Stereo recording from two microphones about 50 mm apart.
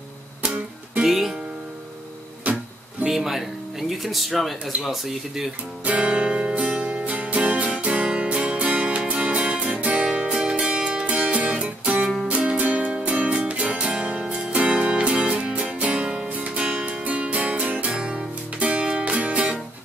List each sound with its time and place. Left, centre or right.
0.4 s music: right
1.0 s music: centre
2.4 s music: right
3.1 s music: centre
4.0 s speech: centre
5.9 s music: right
16.3 s music: right